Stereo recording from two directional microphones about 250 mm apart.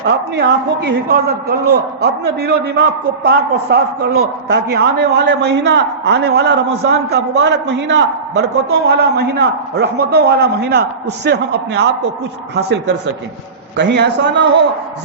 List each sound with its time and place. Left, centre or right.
0.3 s a man's voice: right